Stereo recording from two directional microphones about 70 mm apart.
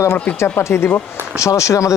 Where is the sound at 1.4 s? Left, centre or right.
Left.